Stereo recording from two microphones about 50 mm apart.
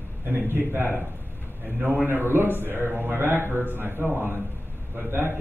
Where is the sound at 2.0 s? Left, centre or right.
Right.